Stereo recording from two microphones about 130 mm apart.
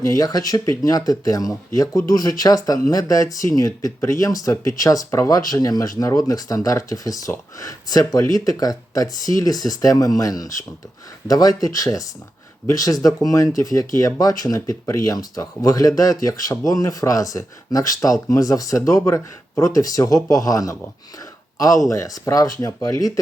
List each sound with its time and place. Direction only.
0.0 s speech: 25° left (ahead or behind)
21.8 s speech: 25° left (ahead or behind)